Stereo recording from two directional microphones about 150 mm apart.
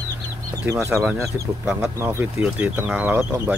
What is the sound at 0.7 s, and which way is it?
Speech, 20° right (ahead or behind).